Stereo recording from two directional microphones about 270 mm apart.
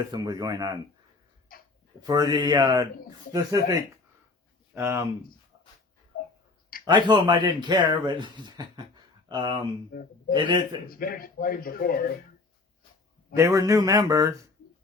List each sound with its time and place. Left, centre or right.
0.1 s speech: centre
2.0 s speech: centre
6.8 s speech: centre
9.9 s speech: left
10.3 s speech: centre
10.8 s speech: left
13.3 s speech: centre